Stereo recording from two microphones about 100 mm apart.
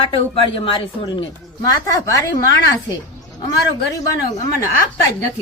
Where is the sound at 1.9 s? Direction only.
30° left (ahead or behind).